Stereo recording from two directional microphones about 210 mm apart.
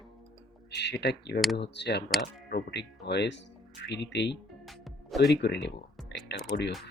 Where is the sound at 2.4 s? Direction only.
50° left (ahead or behind).